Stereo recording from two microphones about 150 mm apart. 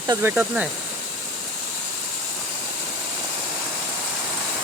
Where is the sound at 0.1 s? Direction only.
15° right (ahead or behind).